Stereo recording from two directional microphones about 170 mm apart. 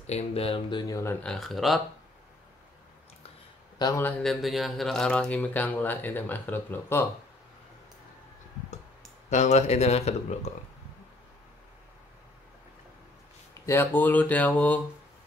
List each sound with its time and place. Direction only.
0.0 s speech: 40° left (ahead or behind); by 1.1 s 20° left (ahead or behind)
1.2 s speech: centre (ahead or behind)
3.7 s a man's voice: 20° left (ahead or behind)
4.0 s speech: centre (ahead or behind)
9.3 s speech: 40° left (ahead or behind)
13.7 s speech: 10° left (ahead or behind)